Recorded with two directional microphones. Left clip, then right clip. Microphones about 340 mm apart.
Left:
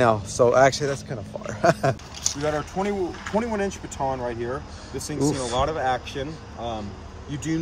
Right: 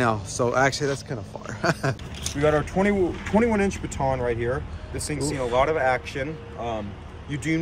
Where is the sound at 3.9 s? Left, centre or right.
Centre.